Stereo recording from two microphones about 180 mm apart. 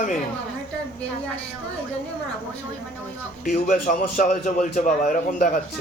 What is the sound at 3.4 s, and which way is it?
A man's voice, 45° left (ahead or behind).